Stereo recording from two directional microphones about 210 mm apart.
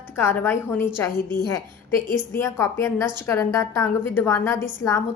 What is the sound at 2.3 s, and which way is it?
A woman's voice, 15° left (ahead or behind).